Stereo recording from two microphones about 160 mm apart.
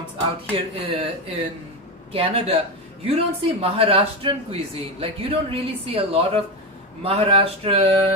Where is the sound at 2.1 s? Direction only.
35° right (ahead or behind).